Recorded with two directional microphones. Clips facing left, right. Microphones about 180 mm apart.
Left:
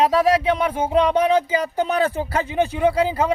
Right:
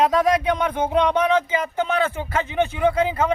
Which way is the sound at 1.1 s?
35° left (ahead or behind).